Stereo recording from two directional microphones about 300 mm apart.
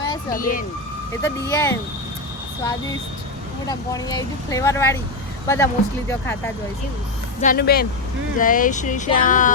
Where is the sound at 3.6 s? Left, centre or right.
Centre.